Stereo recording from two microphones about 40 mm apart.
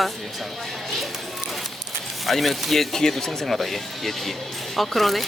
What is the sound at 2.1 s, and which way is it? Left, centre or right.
Speech, centre.